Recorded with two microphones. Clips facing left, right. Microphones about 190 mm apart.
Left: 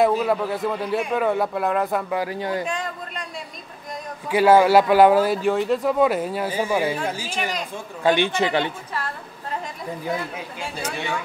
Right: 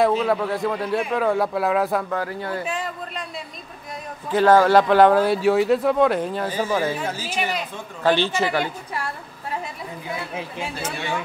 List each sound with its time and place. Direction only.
0.0 s a man's voice: centre (ahead or behind)
2.0 s speech: 15° left (ahead or behind)
2.6 s a sound: 5° right (ahead or behind)
4.3 s speech: 10° left (ahead or behind)
7.2 s speech: 5° right (ahead or behind)
8.0 s speech: 15° left (ahead or behind)